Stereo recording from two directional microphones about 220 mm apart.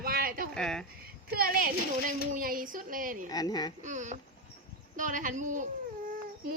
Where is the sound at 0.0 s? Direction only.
40° right (ahead or behind).